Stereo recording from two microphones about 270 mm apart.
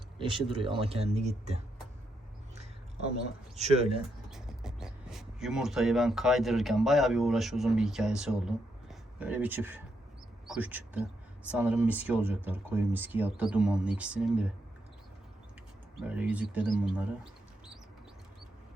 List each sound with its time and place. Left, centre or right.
0.2 s speech: centre
3.6 s speech: right
4.3 s speech: centre
16.0 s speech: centre